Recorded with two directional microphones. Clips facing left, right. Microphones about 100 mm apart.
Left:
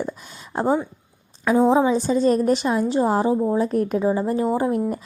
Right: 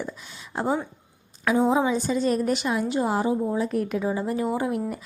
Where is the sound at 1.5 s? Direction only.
30° left (ahead or behind).